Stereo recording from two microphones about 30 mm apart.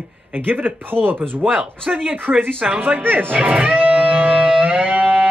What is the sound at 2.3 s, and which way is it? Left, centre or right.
Speech, right.